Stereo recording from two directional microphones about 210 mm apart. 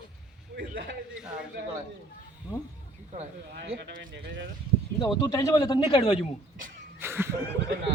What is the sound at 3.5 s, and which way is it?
Speech, 55° right (ahead or behind).